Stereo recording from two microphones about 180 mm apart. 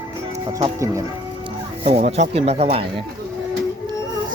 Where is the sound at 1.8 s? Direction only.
35° right (ahead or behind).